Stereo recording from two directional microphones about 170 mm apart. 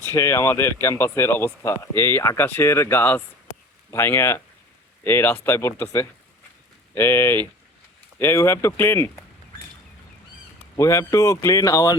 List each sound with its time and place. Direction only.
0.1 s speech: 15° left (ahead or behind)
10.8 s speech: 15° left (ahead or behind)